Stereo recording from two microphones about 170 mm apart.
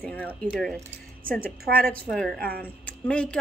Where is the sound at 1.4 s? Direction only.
60° right (ahead or behind).